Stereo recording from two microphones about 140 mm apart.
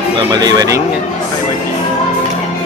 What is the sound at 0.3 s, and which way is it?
Speech, 30° right (ahead or behind).